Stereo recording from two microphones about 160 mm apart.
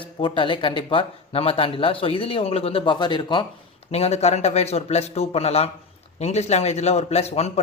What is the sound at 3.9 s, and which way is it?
Speech, 40° left (ahead or behind).